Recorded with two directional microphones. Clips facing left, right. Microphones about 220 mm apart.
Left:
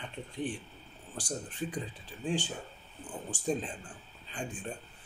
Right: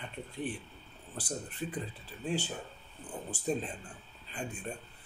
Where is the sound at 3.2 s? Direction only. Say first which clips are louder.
Left 1 dB; 5° right (ahead or behind).